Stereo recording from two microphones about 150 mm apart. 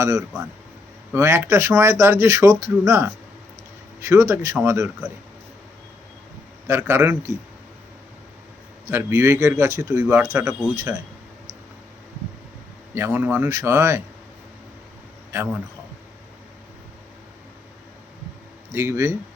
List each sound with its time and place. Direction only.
0.0 s speech: 20° right (ahead or behind)
6.7 s speech: 15° right (ahead or behind)
8.9 s speech: 15° right (ahead or behind)
12.9 s speech: 15° right (ahead or behind)
18.7 s speech: 15° right (ahead or behind)